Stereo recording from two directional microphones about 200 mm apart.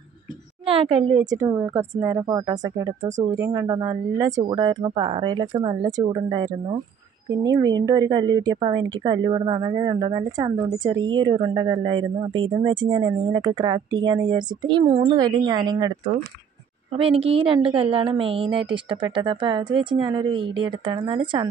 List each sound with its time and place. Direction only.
0.7 s a woman's voice: 25° right (ahead or behind)
16.9 s speech: 30° right (ahead or behind)